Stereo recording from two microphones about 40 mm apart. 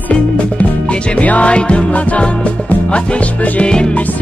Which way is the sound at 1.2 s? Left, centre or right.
Left.